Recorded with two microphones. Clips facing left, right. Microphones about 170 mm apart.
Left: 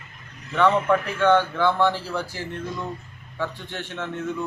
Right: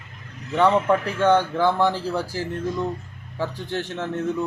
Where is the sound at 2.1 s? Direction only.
40° right (ahead or behind).